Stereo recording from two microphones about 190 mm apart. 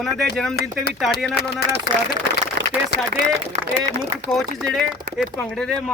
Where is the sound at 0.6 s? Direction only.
55° left (ahead or behind).